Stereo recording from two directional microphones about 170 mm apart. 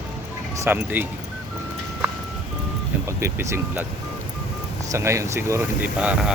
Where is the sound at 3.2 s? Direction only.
15° right (ahead or behind).